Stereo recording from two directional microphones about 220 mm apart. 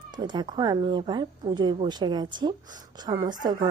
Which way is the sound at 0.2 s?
20° right (ahead or behind).